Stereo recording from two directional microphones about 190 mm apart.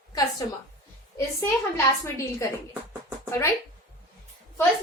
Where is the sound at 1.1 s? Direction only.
15° left (ahead or behind).